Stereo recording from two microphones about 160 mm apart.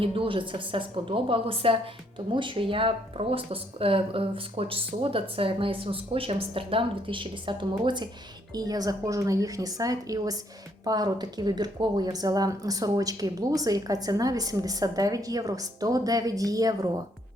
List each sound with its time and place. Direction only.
0.0 s a woman's voice: 35° right (ahead or behind)